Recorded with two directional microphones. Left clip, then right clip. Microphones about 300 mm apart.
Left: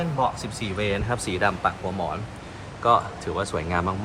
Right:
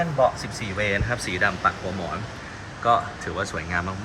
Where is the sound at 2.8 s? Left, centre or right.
Centre.